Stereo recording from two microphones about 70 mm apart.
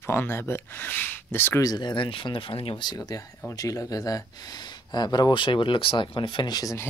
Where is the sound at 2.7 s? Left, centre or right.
Left.